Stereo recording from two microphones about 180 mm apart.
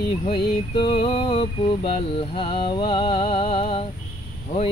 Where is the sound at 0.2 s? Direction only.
30° left (ahead or behind).